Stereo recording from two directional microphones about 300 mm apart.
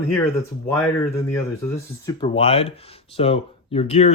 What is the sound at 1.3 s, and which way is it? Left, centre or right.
Speech, centre.